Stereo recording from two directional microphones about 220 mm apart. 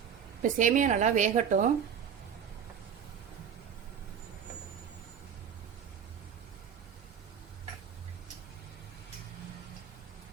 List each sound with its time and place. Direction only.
0.4 s speech: 35° right (ahead or behind)